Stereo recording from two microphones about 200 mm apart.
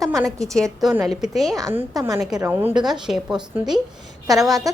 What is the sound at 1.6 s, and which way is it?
A woman's voice, 15° right (ahead or behind).